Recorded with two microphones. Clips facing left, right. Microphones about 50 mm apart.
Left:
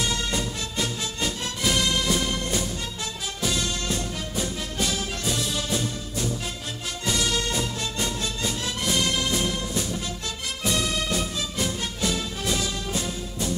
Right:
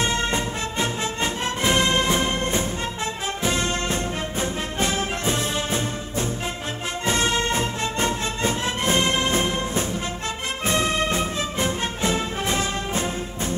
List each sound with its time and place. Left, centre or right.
0.0 s music: right